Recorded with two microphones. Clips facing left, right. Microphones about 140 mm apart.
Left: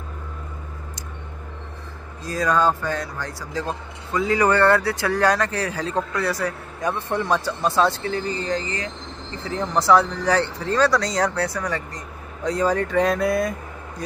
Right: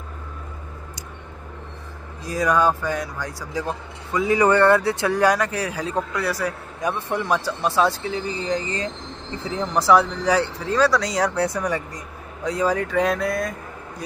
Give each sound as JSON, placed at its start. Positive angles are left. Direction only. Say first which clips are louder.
{"t": 2.2, "sound": "speech", "louder": "right 1 dB", "side_deg": -15}
{"t": 9.6, "sound": "speech", "louder": "even", "side_deg": -10}
{"t": 11.4, "sound": "speech", "louder": "right 2 dB", "side_deg": -20}
{"t": 12.4, "sound": "speech", "louder": "left 1 dB", "side_deg": -5}